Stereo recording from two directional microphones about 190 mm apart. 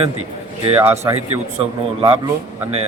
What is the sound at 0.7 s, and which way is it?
Speech, 15° right (ahead or behind).